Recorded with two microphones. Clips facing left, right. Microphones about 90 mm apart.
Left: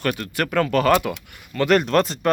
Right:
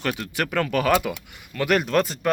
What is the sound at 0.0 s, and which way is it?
Speech, 5° right (ahead or behind).